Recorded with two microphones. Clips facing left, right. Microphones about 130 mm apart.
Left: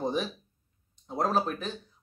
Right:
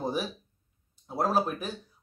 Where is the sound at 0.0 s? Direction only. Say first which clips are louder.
Left 1 dB; 5° right (ahead or behind).